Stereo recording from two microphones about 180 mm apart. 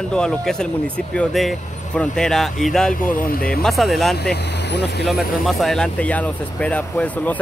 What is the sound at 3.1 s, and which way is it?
Speech, 50° left (ahead or behind).